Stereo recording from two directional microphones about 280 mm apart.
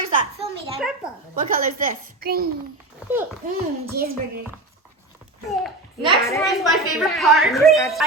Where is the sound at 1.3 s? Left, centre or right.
Right.